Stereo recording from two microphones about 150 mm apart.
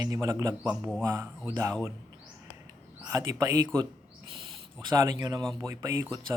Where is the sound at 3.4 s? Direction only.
30° right (ahead or behind).